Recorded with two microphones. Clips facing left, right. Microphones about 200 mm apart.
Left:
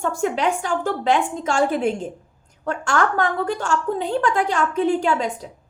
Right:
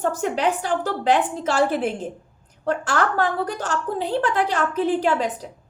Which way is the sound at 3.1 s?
40° right (ahead or behind).